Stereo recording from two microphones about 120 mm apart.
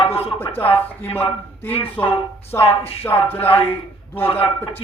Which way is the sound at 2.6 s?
55° left (ahead or behind).